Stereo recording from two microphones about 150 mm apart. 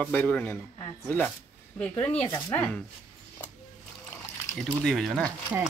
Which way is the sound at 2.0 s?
10° left (ahead or behind).